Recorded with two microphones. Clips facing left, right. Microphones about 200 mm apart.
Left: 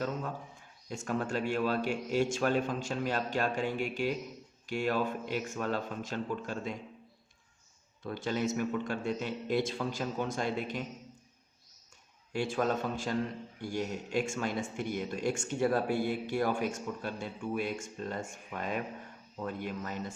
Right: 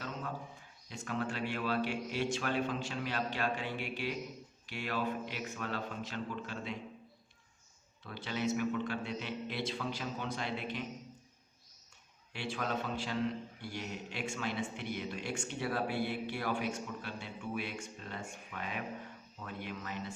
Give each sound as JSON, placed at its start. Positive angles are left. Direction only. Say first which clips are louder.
{"t": 0.9, "sound": "a man's voice", "louder": "left 4 dB", "side_deg": 45}
{"t": 8.0, "sound": "a man's voice", "louder": "left 4 dB", "side_deg": 45}
{"t": 12.3, "sound": "a man's voice", "louder": "left 7 dB", "side_deg": 45}